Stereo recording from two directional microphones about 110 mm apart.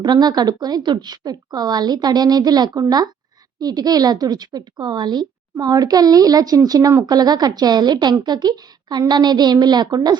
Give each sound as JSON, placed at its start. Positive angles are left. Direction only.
{"t": 0.0, "sound": "speech", "side_deg": -40}